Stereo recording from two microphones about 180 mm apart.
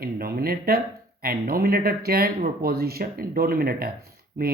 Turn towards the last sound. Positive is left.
turn(degrees=-55)  # may be behind; listen again after turning